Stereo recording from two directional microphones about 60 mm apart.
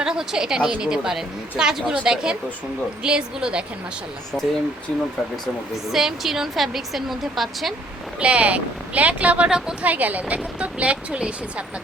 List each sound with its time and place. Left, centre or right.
0.0 s a woman's voice: centre
5.7 s a woman's voice: centre
8.2 s a woman's voice: right
9.8 s speech: right